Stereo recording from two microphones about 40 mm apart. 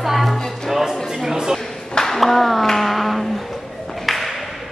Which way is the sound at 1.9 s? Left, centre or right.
Centre.